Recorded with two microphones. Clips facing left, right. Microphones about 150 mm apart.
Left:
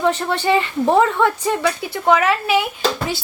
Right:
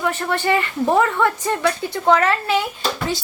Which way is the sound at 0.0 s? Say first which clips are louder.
Left 3 dB; 20° left (ahead or behind).